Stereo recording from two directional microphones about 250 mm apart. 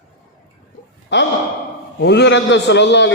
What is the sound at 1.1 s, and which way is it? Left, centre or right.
A man's voice, left.